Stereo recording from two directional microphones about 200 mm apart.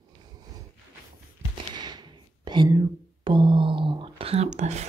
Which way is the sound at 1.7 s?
20° right (ahead or behind).